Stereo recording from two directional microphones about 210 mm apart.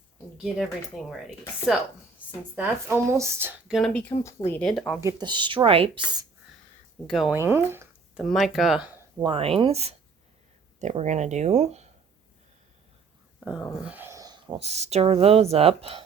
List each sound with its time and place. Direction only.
0.4 s speech: centre (ahead or behind)
2.6 s speech: 10° right (ahead or behind)
3.8 s speech: centre (ahead or behind)
4.2 s speech: 15° left (ahead or behind)
4.9 s speech: 15° right (ahead or behind)
7.1 s speech: centre (ahead or behind)
7.3 s speech: 10° right (ahead or behind)
8.2 s speech: centre (ahead or behind)
9.2 s speech: 25° right (ahead or behind)
13.4 s speech: centre (ahead or behind); by 16.0 s 25° right (ahead or behind)